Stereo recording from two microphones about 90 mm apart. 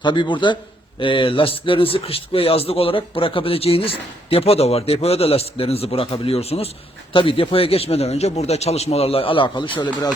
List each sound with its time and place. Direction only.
0.0 s a man's voice: 60° left (ahead or behind)